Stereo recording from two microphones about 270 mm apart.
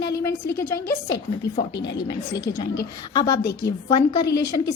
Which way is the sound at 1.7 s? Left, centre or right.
Left.